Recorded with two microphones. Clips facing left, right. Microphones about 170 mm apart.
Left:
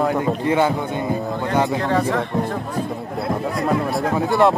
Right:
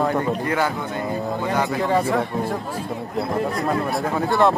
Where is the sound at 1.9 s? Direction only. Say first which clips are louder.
Even; 10° right (ahead or behind).